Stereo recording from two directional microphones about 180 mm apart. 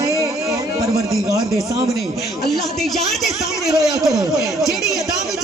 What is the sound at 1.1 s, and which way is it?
Speech, 20° right (ahead or behind).